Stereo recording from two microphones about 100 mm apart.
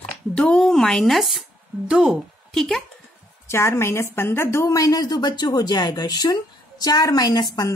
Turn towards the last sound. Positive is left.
turn(degrees=40)  # may be behind; listen again after turning